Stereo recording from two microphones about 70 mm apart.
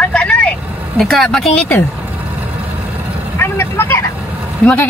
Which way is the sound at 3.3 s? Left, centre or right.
Left.